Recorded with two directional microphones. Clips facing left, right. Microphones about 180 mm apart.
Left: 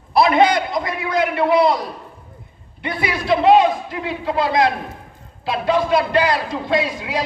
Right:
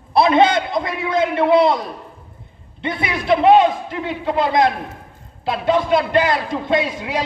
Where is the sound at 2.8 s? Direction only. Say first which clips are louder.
Even; 25° right (ahead or behind).